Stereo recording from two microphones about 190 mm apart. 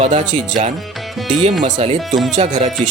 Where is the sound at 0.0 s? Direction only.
40° right (ahead or behind).